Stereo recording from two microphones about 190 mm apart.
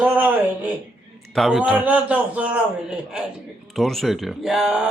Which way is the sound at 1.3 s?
Centre (ahead or behind).